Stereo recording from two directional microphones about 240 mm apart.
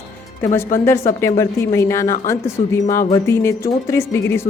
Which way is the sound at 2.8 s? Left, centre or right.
Left.